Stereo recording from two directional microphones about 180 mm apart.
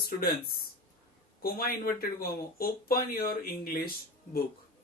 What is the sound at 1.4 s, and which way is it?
Speech, 55° left (ahead or behind).